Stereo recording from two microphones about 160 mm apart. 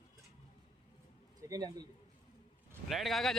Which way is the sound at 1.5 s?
20° right (ahead or behind).